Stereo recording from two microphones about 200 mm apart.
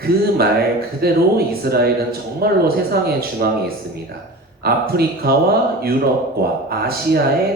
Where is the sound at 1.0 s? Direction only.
50° right (ahead or behind).